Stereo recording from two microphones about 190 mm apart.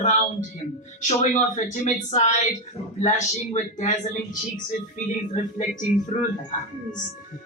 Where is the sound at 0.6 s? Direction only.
40° left (ahead or behind).